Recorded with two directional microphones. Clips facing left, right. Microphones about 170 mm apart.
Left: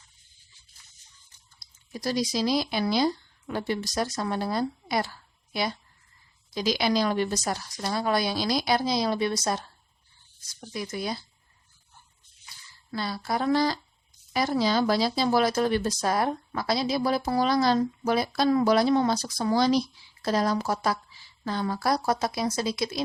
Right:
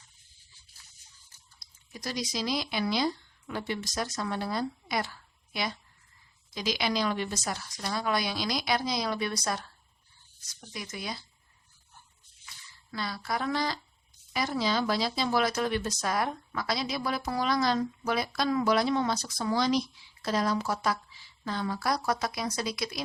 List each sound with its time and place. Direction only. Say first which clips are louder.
1.9 s speech: left 7 dB; 35° left (ahead or behind)
6.5 s speech: left 5 dB; 35° left (ahead or behind)
12.9 s speech: left 4 dB; 30° left (ahead or behind)